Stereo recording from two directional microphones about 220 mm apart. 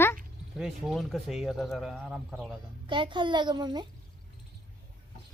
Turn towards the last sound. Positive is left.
turn(degrees=-20)  # may be behind; listen again after turning